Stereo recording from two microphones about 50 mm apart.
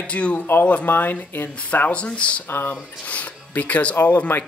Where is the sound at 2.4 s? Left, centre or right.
Left.